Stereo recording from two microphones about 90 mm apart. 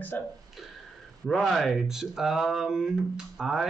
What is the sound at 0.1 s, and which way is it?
Speech, 20° left (ahead or behind).